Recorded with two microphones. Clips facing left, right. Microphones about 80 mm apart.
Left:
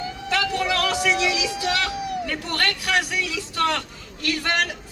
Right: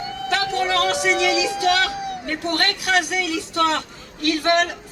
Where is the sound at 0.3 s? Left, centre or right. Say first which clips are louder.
Right 2 dB; right.